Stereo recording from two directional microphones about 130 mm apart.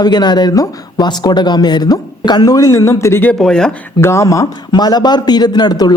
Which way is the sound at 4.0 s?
20° left (ahead or behind).